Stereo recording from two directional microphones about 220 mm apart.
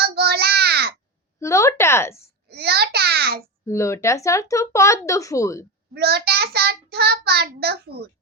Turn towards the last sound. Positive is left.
turn(degrees=-45)  # may be behind; listen again after turning